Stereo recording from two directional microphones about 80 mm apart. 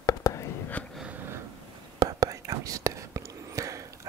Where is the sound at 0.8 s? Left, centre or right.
Centre.